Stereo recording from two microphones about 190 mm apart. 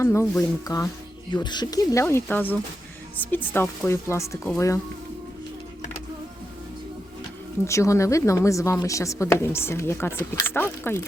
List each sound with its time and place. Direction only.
0.0 s a woman's voice: 15° left (ahead or behind)
7.7 s a woman's voice: 15° left (ahead or behind)